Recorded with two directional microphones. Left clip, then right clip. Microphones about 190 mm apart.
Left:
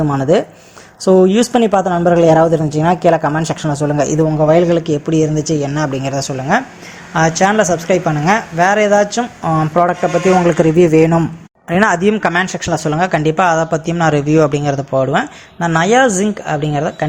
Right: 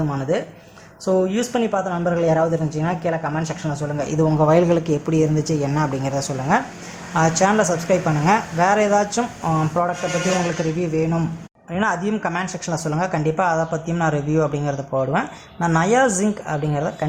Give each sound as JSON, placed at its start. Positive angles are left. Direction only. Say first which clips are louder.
{"t": 0.1, "sound": "speech", "louder": "left 9 dB", "side_deg": 40}
{"t": 4.3, "sound": "a woman's voice", "louder": "left 3 dB", "side_deg": 5}
{"t": 10.6, "sound": "speech", "louder": "left 12 dB", "side_deg": 35}